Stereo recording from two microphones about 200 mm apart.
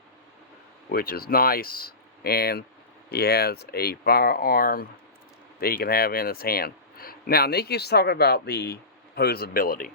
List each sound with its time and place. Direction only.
0.9 s speech: 50° left (ahead or behind)